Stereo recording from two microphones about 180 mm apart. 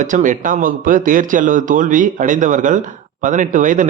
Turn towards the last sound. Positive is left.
turn(degrees=-45)  # may be behind; listen again after turning